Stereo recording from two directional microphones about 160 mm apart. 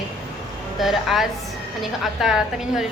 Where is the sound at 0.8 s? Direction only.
Centre (ahead or behind).